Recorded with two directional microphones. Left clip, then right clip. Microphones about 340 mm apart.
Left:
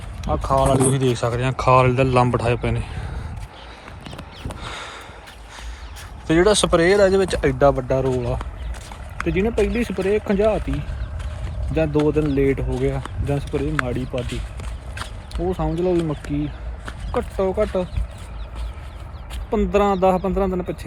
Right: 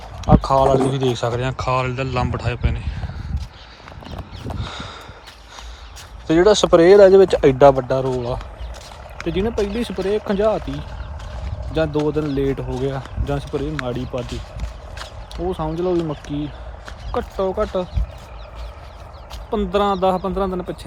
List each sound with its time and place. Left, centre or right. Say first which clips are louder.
0.3 s speech: right 4 dB; centre
4.6 s a sound: left 2 dB; centre
6.2 s speech: right 3 dB; centre
7.9 s speech: right 1 dB; centre
11.7 s speech: even; centre
15.4 s speech: even; centre
19.5 s speech: even; centre